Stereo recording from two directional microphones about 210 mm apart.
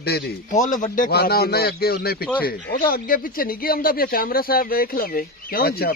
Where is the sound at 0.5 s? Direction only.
35° left (ahead or behind).